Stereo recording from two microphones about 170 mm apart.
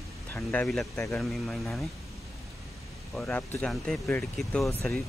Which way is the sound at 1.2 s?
Centre (ahead or behind).